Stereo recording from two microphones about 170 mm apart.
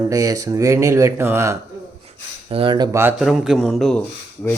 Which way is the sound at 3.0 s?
5° right (ahead or behind).